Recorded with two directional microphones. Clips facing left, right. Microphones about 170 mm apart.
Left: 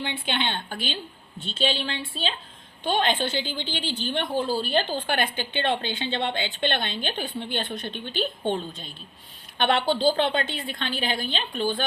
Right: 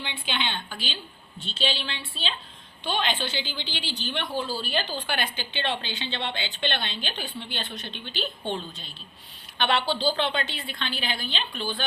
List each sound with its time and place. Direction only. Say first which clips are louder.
0.0 s a woman's voice: left 3 dB; 55° left (ahead or behind)